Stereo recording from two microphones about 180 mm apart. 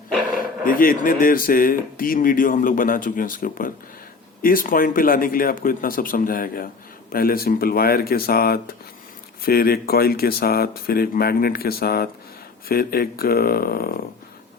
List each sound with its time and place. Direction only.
0.3 s speech: 50° left (ahead or behind)